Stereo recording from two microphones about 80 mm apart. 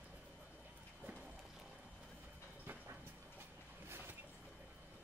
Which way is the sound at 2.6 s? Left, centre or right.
Right.